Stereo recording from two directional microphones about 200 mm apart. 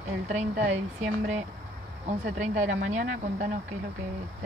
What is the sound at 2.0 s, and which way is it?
Speech, 40° right (ahead or behind).